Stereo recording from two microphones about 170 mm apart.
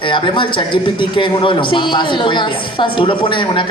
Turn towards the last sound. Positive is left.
turn(degrees=30)  # may be behind; listen again after turning